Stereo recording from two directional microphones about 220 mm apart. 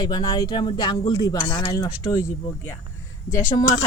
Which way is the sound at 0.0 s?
20° left (ahead or behind).